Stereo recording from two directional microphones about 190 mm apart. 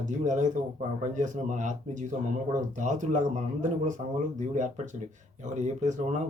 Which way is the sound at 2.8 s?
40° right (ahead or behind).